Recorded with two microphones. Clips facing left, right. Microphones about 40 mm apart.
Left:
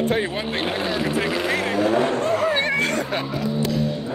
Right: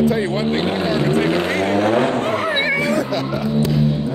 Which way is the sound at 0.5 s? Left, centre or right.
Centre.